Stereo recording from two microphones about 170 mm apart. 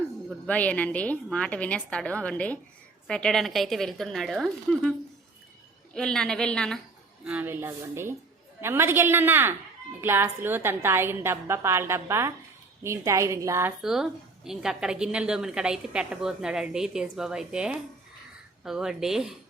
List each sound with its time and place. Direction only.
0.3 s a woman's voice: 10° left (ahead or behind)
7.3 s a woman's voice: 10° right (ahead or behind)
13.8 s a woman's voice: 5° right (ahead or behind)